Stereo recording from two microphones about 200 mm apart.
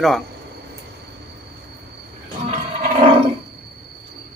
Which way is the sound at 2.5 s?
30° right (ahead or behind).